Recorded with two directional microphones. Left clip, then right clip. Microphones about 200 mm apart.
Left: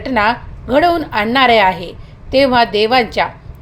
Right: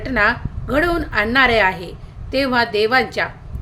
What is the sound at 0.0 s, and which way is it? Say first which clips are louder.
A woman's voice: left 3 dB; 15° left (ahead or behind).